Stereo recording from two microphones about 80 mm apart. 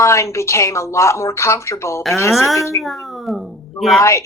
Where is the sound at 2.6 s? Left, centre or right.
Left.